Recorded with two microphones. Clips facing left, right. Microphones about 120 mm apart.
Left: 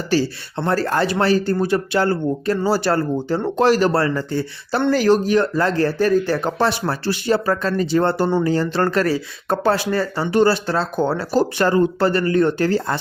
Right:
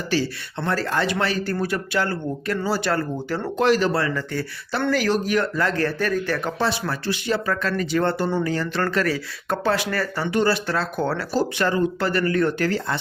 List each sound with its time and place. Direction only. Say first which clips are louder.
0.1 s speech: left 5 dB; 35° left (ahead or behind)
11.5 s speech: left 5 dB; 35° left (ahead or behind)